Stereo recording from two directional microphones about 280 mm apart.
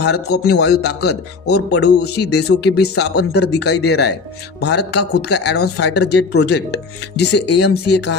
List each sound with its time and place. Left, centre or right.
0.0 s speech: left